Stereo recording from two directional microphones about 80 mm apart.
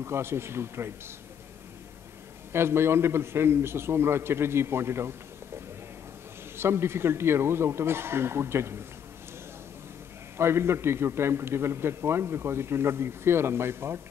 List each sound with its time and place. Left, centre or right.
0.0 s a man's voice: right
2.5 s a man's voice: right
6.5 s a man's voice: right
10.3 s a man's voice: right